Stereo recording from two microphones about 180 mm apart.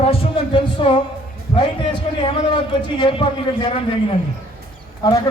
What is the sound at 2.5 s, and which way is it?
A man's voice, 25° left (ahead or behind).